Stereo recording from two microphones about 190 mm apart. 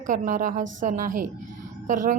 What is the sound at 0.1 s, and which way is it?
Speech, 45° right (ahead or behind).